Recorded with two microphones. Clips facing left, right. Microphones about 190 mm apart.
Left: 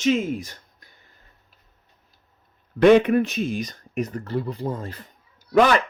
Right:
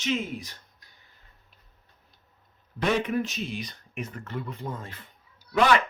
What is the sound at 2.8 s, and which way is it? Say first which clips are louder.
Speech: left 11 dB; 65° left (ahead or behind).